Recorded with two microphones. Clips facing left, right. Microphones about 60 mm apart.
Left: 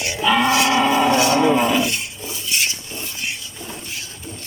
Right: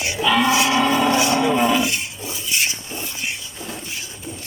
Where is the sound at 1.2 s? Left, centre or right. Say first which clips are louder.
Left 2 dB; centre.